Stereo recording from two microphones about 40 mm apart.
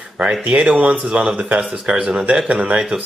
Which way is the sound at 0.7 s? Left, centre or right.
Right.